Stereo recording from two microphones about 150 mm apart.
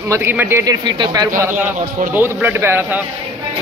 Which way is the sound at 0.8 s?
30° right (ahead or behind).